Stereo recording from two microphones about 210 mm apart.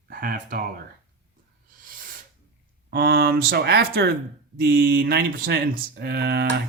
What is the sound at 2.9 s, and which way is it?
Speech, 45° right (ahead or behind).